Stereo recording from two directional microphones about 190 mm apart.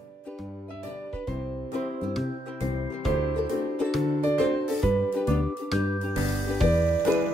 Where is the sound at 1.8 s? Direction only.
Centre (ahead or behind).